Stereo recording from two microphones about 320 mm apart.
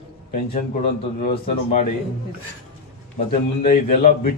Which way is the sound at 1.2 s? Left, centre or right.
Left.